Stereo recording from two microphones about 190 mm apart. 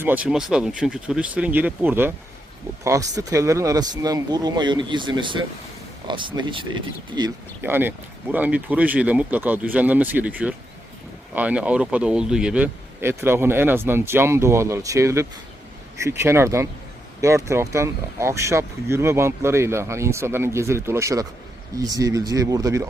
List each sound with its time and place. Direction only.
0.0 s speech: 10° right (ahead or behind)
7.6 s speech: 10° right (ahead or behind)